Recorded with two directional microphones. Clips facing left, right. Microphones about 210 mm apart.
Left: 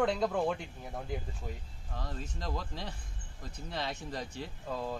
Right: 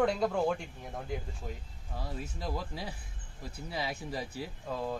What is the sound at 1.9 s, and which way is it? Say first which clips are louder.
Speech: right 1 dB; 10° right (ahead or behind).